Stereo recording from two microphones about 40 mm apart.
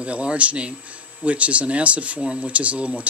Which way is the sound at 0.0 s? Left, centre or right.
Right.